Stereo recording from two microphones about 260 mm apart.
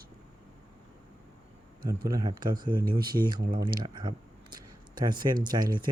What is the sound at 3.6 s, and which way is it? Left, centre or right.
Speech, centre.